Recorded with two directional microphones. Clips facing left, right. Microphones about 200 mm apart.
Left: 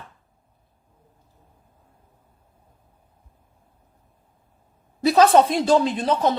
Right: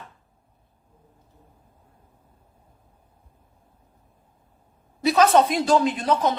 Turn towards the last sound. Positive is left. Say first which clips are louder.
# left 1 dB
turn(degrees=30)  # may be behind; listen again after turning